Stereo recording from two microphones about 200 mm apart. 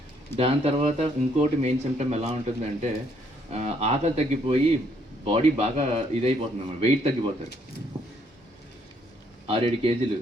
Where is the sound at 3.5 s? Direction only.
35° right (ahead or behind).